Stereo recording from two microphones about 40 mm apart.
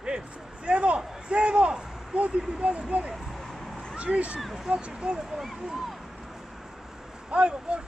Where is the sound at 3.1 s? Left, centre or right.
Centre.